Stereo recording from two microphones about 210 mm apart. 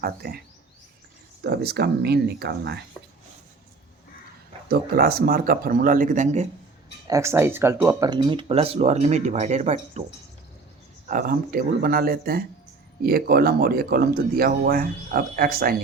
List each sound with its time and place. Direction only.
0.0 s speech: 45° right (ahead or behind)
1.5 s speech: 50° right (ahead or behind)
4.7 s a man's voice: 45° right (ahead or behind)
7.1 s speech: 15° right (ahead or behind); by 10.0 s 30° right (ahead or behind)
11.1 s speech: 40° right (ahead or behind)